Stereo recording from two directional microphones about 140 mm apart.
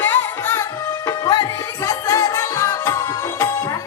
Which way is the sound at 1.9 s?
20° left (ahead or behind).